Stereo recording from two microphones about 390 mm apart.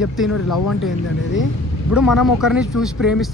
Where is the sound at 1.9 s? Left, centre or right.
Centre.